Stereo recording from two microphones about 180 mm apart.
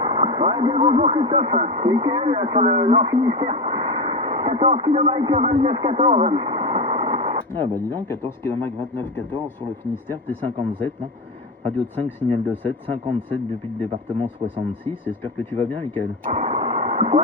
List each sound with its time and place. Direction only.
0.0 s speech: 25° right (ahead or behind)
7.6 s speech: 10° left (ahead or behind)
11.6 s speech: 10° left (ahead or behind)
14.4 s speech: 35° right (ahead or behind)
14.8 s speech: 10° left (ahead or behind)
16.5 s radio: 35° right (ahead or behind)